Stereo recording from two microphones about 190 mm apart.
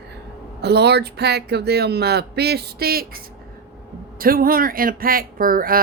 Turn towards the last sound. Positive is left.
turn(degrees=-50)  # may be behind; listen again after turning